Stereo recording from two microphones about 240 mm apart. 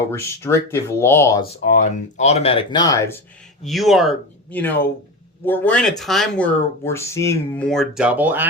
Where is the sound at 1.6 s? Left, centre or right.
Left.